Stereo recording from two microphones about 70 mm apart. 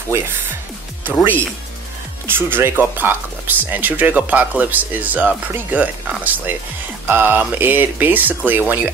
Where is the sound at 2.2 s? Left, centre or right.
Right.